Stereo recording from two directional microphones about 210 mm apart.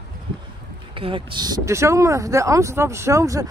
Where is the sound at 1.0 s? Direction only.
25° right (ahead or behind).